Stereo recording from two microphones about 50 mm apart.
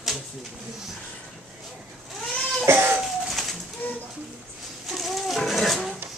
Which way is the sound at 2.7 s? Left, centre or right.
Right.